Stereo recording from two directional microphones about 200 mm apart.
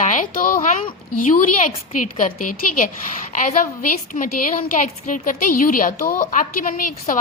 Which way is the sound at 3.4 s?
40° left (ahead or behind).